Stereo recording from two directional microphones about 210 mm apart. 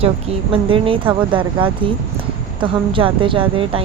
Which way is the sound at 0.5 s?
25° right (ahead or behind).